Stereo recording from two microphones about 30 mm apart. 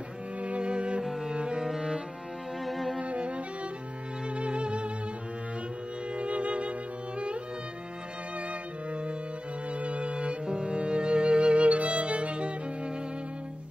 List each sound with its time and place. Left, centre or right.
0.4 s cello: right
1.3 s music: right
1.6 s cello: centre
2.6 s music: centre
3.0 s music: right
6.1 s music: right
9.7 s music: right
10.4 s music: right